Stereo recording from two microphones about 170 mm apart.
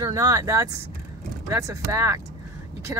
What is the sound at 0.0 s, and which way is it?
Speech, 20° right (ahead or behind).